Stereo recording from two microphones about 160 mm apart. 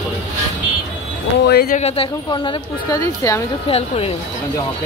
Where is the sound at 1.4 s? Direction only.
90° left.